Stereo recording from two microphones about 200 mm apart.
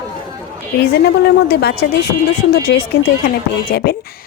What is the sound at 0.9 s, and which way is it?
A woman's voice, 55° left (ahead or behind).